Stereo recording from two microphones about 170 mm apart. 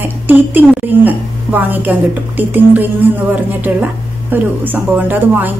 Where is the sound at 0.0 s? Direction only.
10° right (ahead or behind).